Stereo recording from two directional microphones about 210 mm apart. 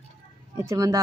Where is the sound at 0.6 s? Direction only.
15° right (ahead or behind).